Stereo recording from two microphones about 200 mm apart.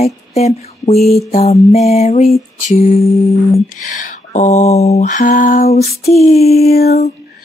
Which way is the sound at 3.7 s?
40° left (ahead or behind).